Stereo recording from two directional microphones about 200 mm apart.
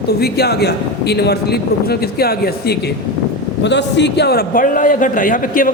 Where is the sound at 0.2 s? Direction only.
55° left (ahead or behind).